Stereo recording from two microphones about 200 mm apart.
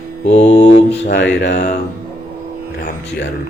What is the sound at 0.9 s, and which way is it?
Speech, 60° left (ahead or behind).